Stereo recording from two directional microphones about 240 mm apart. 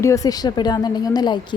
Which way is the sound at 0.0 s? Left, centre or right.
Centre.